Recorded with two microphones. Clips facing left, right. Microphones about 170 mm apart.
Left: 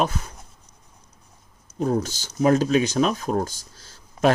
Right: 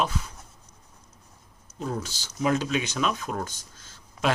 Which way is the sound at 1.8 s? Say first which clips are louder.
Left 9 dB; 45° left (ahead or behind).